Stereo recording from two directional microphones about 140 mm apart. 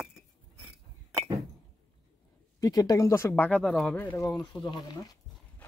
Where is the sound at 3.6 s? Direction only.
5° left (ahead or behind).